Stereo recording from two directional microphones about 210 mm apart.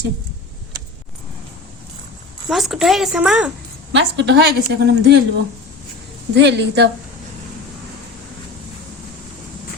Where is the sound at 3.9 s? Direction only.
55° right (ahead or behind).